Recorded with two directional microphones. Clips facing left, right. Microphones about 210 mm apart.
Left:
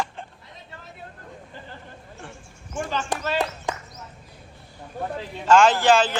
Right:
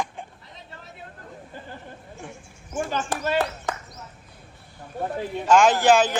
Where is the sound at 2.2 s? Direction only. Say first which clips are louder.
Right 1 dB; 10° right (ahead or behind).